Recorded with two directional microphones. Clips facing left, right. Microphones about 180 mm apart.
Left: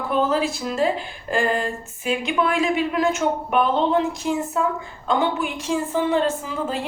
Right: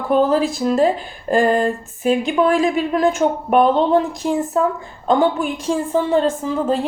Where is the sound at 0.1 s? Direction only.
40° right (ahead or behind).